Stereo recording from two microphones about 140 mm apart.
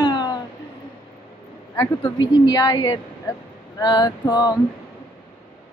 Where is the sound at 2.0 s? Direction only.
35° left (ahead or behind).